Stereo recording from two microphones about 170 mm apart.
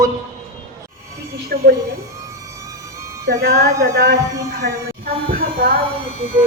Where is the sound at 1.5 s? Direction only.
60° right (ahead or behind).